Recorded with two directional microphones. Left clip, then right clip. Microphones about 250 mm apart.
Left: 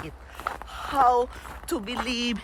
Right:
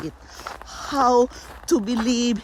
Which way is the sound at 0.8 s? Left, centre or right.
Right.